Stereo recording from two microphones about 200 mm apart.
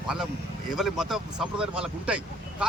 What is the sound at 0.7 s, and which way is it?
Speech, centre (ahead or behind).